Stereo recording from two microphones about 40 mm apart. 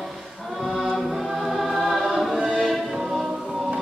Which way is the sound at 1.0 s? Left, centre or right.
Centre.